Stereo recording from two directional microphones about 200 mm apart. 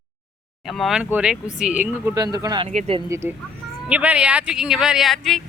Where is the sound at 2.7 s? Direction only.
40° right (ahead or behind).